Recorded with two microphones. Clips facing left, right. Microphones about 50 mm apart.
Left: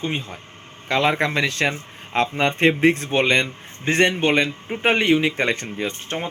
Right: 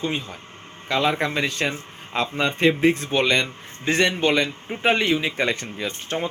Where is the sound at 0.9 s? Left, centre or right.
Left.